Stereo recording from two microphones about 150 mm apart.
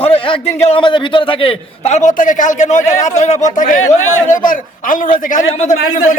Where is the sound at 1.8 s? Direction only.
50° left (ahead or behind).